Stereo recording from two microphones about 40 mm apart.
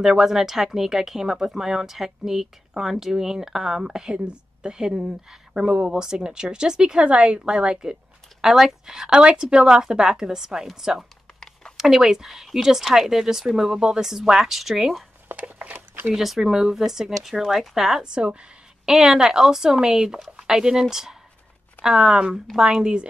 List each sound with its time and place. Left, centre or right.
0.0 s a woman's voice: centre
9.1 s a woman's voice: right; by 15.0 s centre
15.3 s a sound: right
16.1 s a woman's voice: centre
18.0 s a woman's voice: right
18.9 s a woman's voice: centre